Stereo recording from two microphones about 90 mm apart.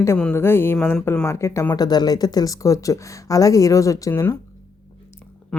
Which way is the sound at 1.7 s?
50° left (ahead or behind).